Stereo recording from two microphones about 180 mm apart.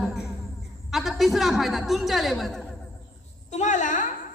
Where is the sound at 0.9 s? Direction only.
Centre (ahead or behind).